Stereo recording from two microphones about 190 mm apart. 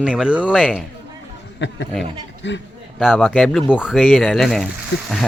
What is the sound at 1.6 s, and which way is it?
Speech, 70° left (ahead or behind).